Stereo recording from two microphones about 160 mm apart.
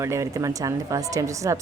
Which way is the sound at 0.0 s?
20° right (ahead or behind).